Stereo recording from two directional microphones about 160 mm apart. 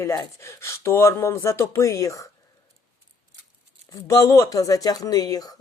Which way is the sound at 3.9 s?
20° left (ahead or behind).